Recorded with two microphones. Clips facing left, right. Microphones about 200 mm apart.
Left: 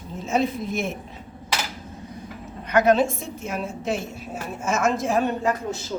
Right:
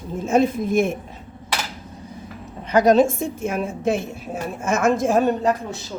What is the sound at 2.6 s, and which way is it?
A woman's voice, 35° right (ahead or behind).